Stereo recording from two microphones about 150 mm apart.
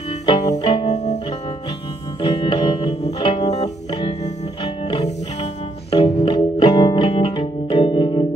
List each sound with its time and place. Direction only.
0.6 s music: 35° left (ahead or behind)
0.8 s music: 50° left (ahead or behind)
2.2 s music: 35° left (ahead or behind)
4.9 s music: 35° left (ahead or behind)